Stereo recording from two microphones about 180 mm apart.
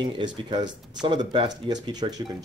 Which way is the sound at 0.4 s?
25° right (ahead or behind).